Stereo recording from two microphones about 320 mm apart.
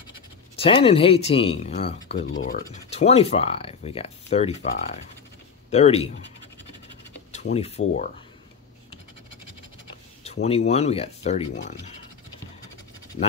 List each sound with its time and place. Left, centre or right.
0.6 s speech: centre
7.3 s speech: centre
10.2 s speech: centre